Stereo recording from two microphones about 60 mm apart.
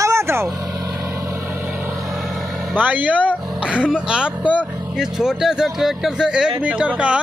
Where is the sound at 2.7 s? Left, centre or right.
Right.